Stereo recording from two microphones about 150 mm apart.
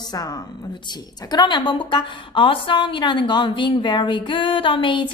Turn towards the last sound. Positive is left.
turn(degrees=35)  # may be behind; listen again after turning